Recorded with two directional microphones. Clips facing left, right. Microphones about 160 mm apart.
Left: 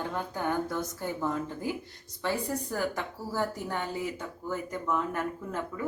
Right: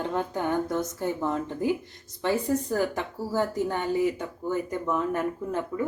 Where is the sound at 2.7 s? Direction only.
20° right (ahead or behind).